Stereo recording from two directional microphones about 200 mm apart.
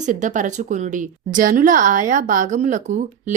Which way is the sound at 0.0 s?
40° right (ahead or behind).